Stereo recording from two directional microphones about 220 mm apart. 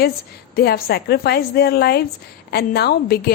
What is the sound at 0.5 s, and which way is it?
A woman's voice, 45° left (ahead or behind).